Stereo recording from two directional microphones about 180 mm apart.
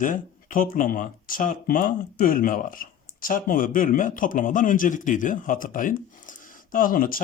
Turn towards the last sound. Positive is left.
turn(degrees=50)  # may be behind; listen again after turning